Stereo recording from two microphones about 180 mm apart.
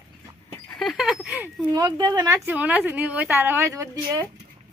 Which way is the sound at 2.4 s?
10° right (ahead or behind).